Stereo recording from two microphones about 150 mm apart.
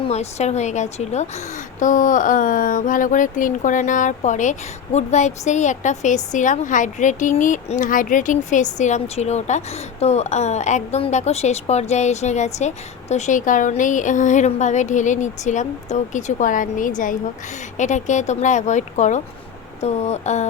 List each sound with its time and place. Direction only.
0.0 s speech: 45° left (ahead or behind)
1.8 s speech: 60° left (ahead or behind)